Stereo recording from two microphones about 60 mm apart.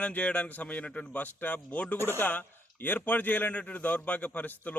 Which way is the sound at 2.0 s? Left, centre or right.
Left.